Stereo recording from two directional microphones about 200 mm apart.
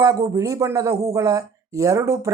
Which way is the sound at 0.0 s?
15° right (ahead or behind).